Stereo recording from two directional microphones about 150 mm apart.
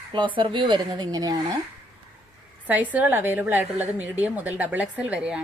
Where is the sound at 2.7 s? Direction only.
10° right (ahead or behind).